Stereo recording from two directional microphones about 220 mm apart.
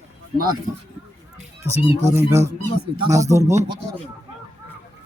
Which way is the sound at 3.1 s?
15° right (ahead or behind).